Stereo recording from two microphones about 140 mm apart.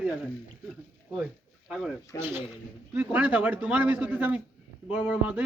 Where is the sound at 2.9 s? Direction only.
10° right (ahead or behind).